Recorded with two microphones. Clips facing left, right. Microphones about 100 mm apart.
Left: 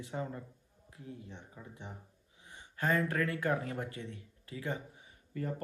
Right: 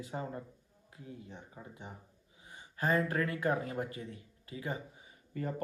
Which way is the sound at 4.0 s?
75° left (ahead or behind).